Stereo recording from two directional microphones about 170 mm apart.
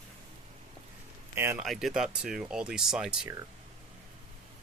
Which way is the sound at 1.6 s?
Centre (ahead or behind).